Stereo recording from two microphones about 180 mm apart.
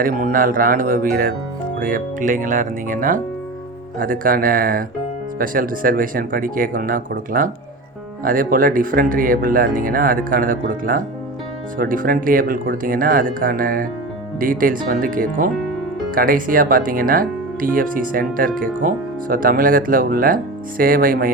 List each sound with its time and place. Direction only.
0.0 s speech: 50° right (ahead or behind)